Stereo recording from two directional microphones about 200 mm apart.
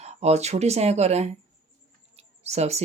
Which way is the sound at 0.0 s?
35° right (ahead or behind).